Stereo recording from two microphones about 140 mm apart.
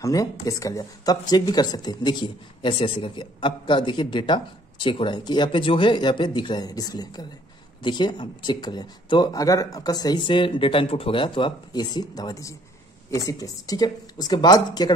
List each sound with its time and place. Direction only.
0.0 s speech: 25° left (ahead or behind)